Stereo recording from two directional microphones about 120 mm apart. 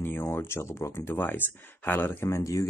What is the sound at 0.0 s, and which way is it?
Speech, 20° left (ahead or behind).